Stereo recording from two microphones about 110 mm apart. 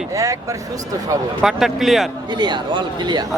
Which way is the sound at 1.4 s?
Centre (ahead or behind).